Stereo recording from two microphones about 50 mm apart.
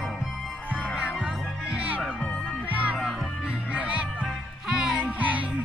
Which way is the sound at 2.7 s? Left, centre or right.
Right.